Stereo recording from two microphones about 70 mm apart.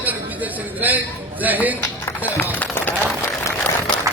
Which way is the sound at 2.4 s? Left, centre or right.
Left.